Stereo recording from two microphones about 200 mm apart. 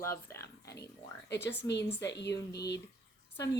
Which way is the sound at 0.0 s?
15° left (ahead or behind).